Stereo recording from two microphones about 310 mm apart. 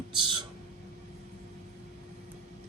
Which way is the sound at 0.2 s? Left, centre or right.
Centre.